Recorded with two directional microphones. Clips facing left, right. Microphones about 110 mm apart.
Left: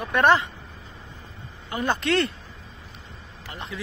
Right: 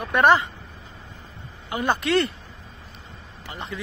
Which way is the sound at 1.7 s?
20° right (ahead or behind).